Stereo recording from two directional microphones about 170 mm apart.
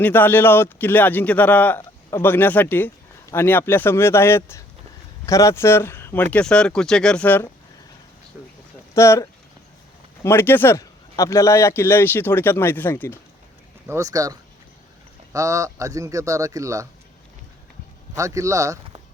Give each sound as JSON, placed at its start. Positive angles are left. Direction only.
{"t": 0.0, "sound": "speech", "side_deg": 10}
{"t": 9.0, "sound": "speech", "side_deg": 15}
{"t": 10.2, "sound": "speech", "side_deg": 15}
{"t": 13.8, "sound": "speech", "side_deg": -15}
{"t": 18.2, "sound": "speech", "side_deg": -20}